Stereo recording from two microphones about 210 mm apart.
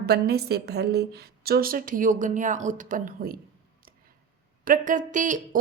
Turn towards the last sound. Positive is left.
turn(degrees=-35)  # may be behind; listen again after turning